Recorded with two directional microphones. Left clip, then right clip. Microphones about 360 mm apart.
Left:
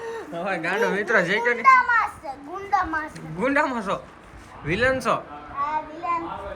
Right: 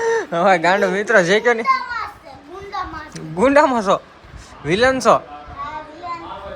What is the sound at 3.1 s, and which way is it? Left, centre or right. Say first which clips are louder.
Speech: right 12 dB; centre.